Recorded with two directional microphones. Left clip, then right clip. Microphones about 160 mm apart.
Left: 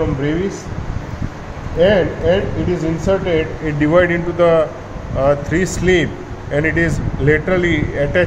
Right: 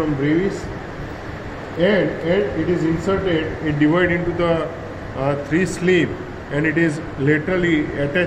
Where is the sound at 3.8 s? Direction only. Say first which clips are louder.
Left 4 dB; 90° left.